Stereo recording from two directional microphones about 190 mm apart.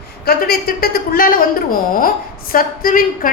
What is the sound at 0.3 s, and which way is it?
A woman's voice, 50° left (ahead or behind).